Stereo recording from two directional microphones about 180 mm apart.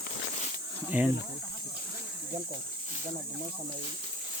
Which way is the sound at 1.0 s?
10° right (ahead or behind).